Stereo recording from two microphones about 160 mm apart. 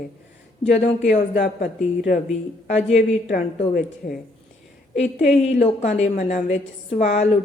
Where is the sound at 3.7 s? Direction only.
65° left (ahead or behind).